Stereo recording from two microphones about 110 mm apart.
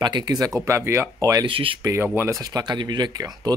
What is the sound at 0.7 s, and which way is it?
Speech, 25° right (ahead or behind).